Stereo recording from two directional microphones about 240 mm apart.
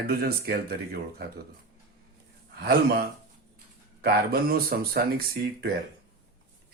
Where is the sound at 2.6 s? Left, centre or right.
Right.